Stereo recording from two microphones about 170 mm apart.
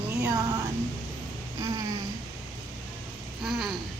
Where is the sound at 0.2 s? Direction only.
20° right (ahead or behind).